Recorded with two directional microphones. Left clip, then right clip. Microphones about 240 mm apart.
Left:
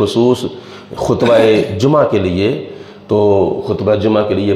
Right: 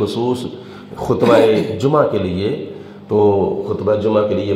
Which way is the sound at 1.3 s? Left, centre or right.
Left.